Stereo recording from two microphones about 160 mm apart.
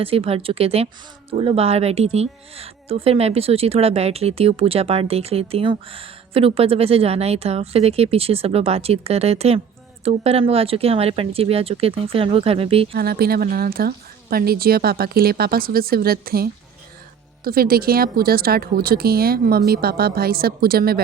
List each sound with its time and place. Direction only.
0.0 s a woman's voice: 35° right (ahead or behind)
12.9 s speech: 75° right (ahead or behind)